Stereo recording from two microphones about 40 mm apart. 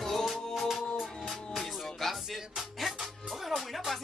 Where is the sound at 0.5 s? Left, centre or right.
Centre.